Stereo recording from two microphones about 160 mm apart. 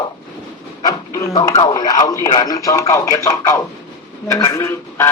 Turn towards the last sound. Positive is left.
turn(degrees=20)  # may be behind; listen again after turning